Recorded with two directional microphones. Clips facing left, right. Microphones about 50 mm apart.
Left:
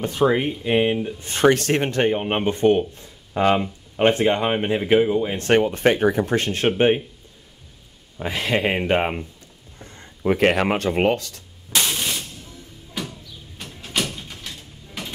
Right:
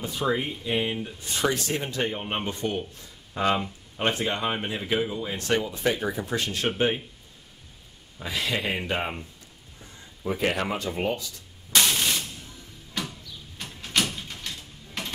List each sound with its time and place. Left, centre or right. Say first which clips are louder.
0.0 s speech: left 7 dB; left
1.2 s speech: left 9 dB; left
2.1 s speech: left 8 dB; left
5.5 s speech: left 8 dB; left
8.2 s speech: left 6 dB; left
9.8 s speech: left 5 dB; left
13.0 s a sound: left 2 dB; centre
13.6 s door: left 1 dB; centre